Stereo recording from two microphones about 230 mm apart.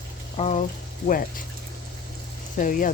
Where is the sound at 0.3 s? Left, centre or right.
Left.